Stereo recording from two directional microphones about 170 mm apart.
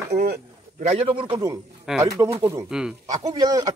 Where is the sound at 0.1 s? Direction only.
65° right (ahead or behind).